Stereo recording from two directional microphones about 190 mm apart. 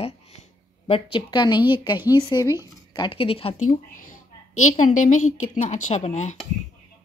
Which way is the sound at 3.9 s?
45° left (ahead or behind).